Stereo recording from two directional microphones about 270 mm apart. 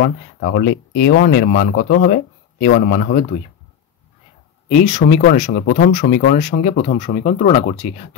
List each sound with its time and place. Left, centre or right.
0.0 s speech: left
4.6 s speech: left